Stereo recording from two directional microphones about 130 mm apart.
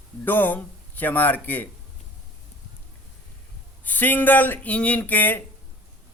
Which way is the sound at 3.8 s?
15° left (ahead or behind).